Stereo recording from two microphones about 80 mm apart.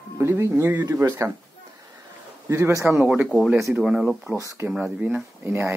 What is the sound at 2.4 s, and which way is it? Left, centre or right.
Speech, right.